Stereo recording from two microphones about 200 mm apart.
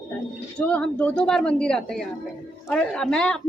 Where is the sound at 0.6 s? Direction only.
5° left (ahead or behind).